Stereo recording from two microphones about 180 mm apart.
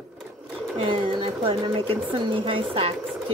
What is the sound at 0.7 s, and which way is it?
Speech, 30° right (ahead or behind).